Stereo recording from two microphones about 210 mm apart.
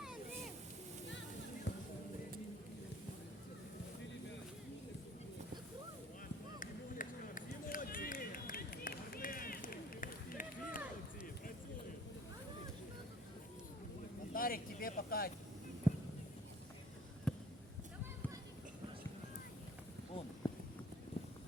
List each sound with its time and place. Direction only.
1.7 s music: 55° left (ahead or behind)
6.6 s run: 40° left (ahead or behind)
14.3 s a sound: 45° left (ahead or behind)
15.9 s a sound: 10° right (ahead or behind)
17.3 s basketball bounce: 5° left (ahead or behind)
20.4 s clip-clop: 20° left (ahead or behind)